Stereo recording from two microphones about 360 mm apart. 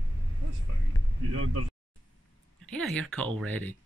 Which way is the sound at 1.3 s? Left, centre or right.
Right.